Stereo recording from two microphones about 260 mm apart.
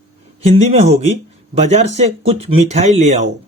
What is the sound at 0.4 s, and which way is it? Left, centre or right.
Speech, right.